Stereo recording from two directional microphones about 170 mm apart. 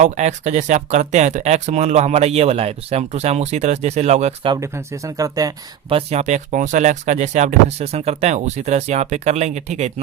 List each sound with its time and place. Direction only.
0.0 s speech: 45° right (ahead or behind)
4.5 s speech: 20° right (ahead or behind)
5.9 s speech: 35° right (ahead or behind)